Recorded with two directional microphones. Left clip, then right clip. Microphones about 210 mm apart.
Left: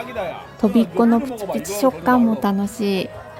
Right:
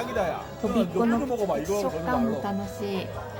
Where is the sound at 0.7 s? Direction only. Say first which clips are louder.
Left 7 dB; 45° left (ahead or behind).